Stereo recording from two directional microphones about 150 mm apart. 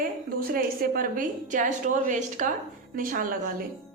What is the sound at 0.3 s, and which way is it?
A woman's voice, 75° right (ahead or behind).